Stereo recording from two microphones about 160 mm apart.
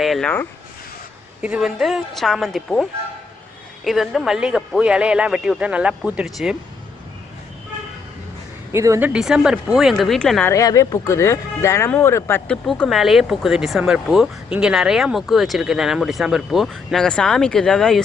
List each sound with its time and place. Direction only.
0.0 s speech: centre (ahead or behind)
1.4 s speech: 5° right (ahead or behind)
3.8 s speech: centre (ahead or behind)
8.7 s speech: 15° right (ahead or behind); by 10.5 s 5° left (ahead or behind)
10.5 s speech: 20° left (ahead or behind)
12.6 s speech: 5° left (ahead or behind)